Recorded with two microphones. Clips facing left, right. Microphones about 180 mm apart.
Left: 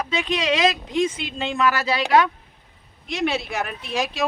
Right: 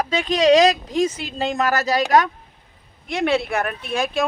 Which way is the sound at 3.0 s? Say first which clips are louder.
Right 4 dB; 55° right (ahead or behind).